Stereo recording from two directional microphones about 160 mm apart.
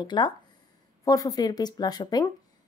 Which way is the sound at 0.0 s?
25° left (ahead or behind).